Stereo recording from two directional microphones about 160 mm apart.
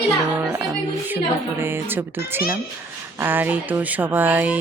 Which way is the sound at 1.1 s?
15° right (ahead or behind).